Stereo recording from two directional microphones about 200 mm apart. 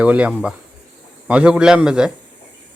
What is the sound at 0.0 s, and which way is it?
Speech, 5° right (ahead or behind).